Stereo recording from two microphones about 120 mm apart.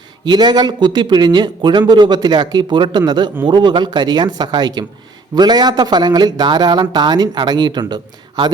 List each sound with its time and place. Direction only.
0.3 s a man's voice: 35° right (ahead or behind)